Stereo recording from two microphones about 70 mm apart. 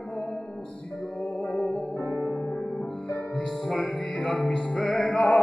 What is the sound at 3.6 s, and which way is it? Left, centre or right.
Music, centre.